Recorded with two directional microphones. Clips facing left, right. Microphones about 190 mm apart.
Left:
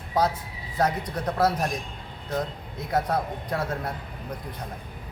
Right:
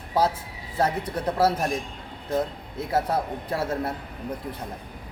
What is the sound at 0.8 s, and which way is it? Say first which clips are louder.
Speech: right 1 dB; 30° right (ahead or behind).